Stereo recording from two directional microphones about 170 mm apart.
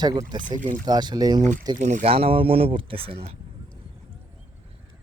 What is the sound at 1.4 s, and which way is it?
Speech, 45° right (ahead or behind).